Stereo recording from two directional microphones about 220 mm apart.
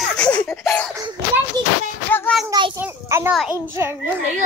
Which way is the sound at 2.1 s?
Centre (ahead or behind).